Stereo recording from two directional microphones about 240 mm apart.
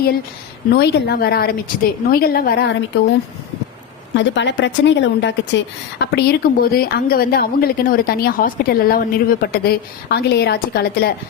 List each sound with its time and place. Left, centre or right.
0.7 s a woman's voice: left
4.1 s a woman's voice: left